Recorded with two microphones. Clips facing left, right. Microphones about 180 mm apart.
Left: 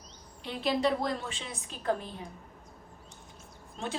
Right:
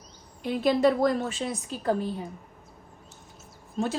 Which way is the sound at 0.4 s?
50° right (ahead or behind).